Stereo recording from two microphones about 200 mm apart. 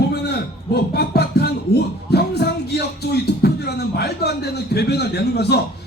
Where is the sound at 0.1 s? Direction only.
55° left (ahead or behind).